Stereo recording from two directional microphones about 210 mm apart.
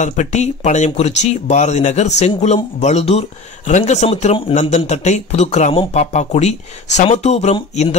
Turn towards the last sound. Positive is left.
turn(degrees=30)  # may be behind; listen again after turning